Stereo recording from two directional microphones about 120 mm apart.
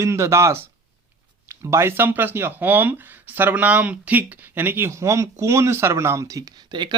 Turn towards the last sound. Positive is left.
turn(degrees=-35)  # may be behind; listen again after turning